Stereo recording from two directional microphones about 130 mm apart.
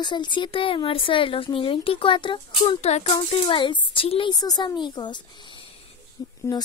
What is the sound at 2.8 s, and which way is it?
Speech, 55° left (ahead or behind).